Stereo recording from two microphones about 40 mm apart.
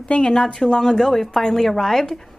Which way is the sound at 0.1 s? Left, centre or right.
Left.